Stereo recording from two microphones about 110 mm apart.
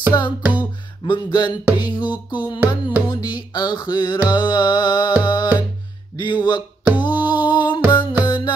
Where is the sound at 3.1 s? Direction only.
40° left (ahead or behind).